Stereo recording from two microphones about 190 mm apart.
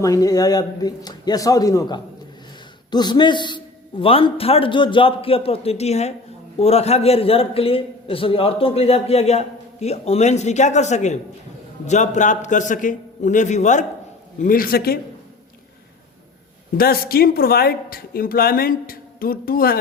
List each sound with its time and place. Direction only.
0.0 s a man's voice: 20° left (ahead or behind); by 14.9 s 55° left (ahead or behind)
16.7 s a woman's voice: 50° left (ahead or behind)